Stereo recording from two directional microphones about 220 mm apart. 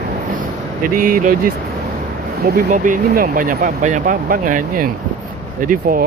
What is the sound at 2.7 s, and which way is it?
Speech, 35° right (ahead or behind).